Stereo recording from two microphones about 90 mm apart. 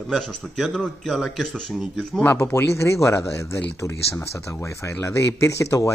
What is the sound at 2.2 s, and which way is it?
Speech, 20° left (ahead or behind).